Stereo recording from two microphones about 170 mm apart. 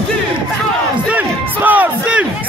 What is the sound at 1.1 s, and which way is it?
Crowd, 10° right (ahead or behind).